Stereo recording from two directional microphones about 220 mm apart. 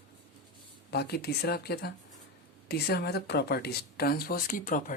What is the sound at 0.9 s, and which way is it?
Speech, 45° left (ahead or behind).